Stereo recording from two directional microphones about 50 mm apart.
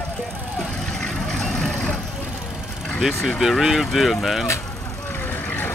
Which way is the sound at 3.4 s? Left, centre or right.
Centre.